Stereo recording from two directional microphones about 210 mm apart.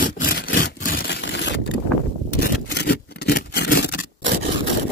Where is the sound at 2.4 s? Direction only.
50° left (ahead or behind).